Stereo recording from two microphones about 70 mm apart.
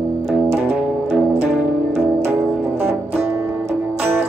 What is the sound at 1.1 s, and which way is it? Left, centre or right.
Music, right.